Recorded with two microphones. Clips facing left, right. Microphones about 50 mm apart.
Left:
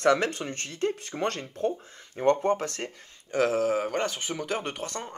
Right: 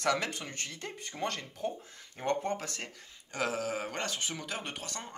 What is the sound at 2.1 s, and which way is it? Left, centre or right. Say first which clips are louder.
Speech: left 9 dB; left.